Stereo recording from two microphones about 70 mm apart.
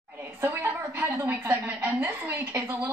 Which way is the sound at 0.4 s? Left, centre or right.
Right.